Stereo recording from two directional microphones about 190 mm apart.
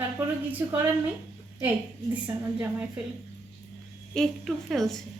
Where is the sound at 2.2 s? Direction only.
10° right (ahead or behind).